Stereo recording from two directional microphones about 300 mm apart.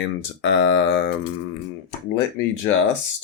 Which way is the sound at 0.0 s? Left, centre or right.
Left.